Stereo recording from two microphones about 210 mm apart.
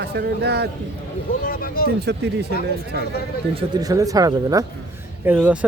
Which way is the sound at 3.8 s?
15° right (ahead or behind).